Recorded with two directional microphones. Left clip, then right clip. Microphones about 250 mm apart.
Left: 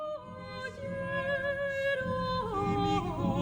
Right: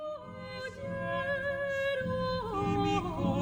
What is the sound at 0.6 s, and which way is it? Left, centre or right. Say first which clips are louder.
Music: even; centre.